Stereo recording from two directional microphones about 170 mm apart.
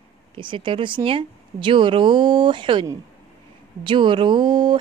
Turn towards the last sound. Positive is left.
turn(degrees=-25)  # may be behind; listen again after turning